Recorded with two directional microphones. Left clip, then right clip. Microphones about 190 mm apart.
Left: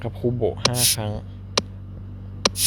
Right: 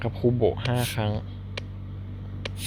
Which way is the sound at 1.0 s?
Centre (ahead or behind).